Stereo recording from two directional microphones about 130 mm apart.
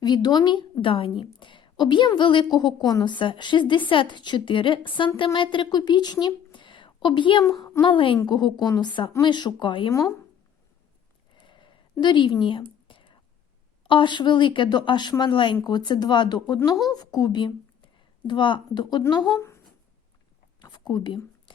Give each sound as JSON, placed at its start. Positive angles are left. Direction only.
{"t": 0.0, "sound": "a woman's voice", "side_deg": 35}
{"t": 9.9, "sound": "speech", "side_deg": 20}
{"t": 11.4, "sound": "whispering", "side_deg": 40}
{"t": 13.8, "sound": "a woman's voice", "side_deg": 40}
{"t": 19.4, "sound": "a sound", "side_deg": 20}
{"t": 20.6, "sound": "a sound", "side_deg": 35}